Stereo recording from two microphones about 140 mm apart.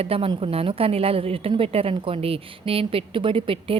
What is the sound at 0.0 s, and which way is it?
A woman's voice, 40° right (ahead or behind).